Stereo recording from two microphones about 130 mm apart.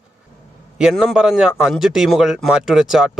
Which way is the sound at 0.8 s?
5° right (ahead or behind).